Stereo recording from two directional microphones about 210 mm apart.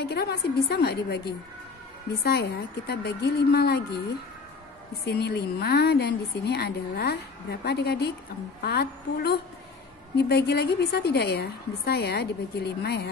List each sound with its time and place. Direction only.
0.0 s a woman's voice: 50° left (ahead or behind)
5.0 s a woman's voice: 50° left (ahead or behind)